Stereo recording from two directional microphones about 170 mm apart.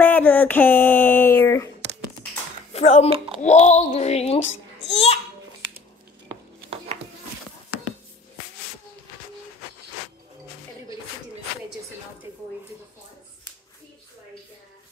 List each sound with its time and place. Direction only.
0.0 s speech: 10° left (ahead or behind)
2.7 s a child's voice: 40° left (ahead or behind)